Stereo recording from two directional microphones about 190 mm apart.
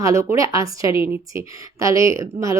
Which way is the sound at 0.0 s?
15° right (ahead or behind).